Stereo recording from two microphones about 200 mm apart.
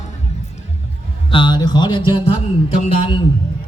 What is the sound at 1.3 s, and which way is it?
Speech, 25° left (ahead or behind).